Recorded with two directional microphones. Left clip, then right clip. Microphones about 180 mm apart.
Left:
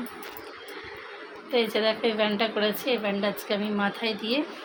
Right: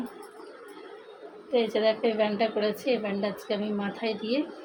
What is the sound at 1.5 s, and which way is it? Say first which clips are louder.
A woman's voice: even; centre (ahead or behind).